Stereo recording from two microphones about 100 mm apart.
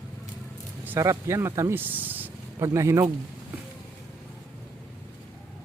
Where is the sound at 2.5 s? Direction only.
30° right (ahead or behind).